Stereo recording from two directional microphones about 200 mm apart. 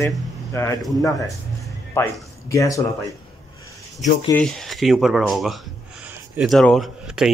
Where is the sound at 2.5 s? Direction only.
15° left (ahead or behind).